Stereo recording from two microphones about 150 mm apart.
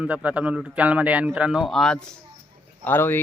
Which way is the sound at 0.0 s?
10° right (ahead or behind).